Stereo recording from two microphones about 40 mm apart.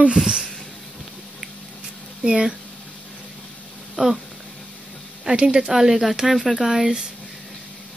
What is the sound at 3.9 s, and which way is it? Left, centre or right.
Speech, centre.